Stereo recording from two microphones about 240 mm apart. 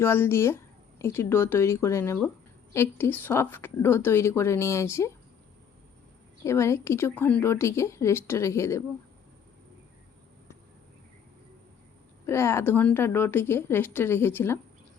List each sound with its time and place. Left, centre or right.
0.0 s a woman's voice: centre
6.4 s a woman's voice: centre
12.2 s a woman's voice: centre